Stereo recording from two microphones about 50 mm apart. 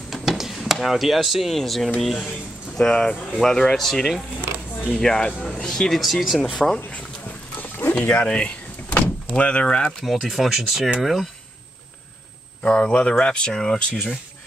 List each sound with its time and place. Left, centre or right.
0.1 s a sound: centre
2.0 s speech: centre
2.9 s speech: centre
6.5 s speech: centre
7.5 s a sound: left
7.9 s speech: left
10.0 s speech: centre
12.6 s speech: left